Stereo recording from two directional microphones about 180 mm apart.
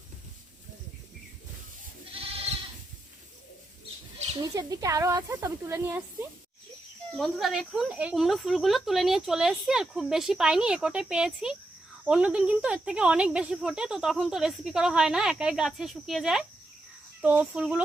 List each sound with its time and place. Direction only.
4.4 s speech: 20° right (ahead or behind)
7.2 s speech: centre (ahead or behind)